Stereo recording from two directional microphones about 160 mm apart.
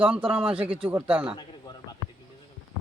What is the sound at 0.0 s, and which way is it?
Speech, 10° right (ahead or behind).